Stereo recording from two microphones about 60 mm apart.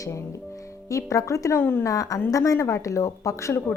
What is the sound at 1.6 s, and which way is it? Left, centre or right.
Speech, left.